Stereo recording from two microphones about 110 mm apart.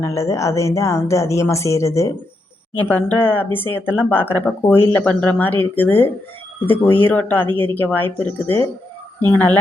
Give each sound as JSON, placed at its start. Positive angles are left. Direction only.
{"t": 0.0, "sound": "a woman's voice", "side_deg": 25}
{"t": 2.7, "sound": "speech", "side_deg": 15}
{"t": 7.4, "sound": "speech", "side_deg": -50}
{"t": 7.7, "sound": "speech", "side_deg": 15}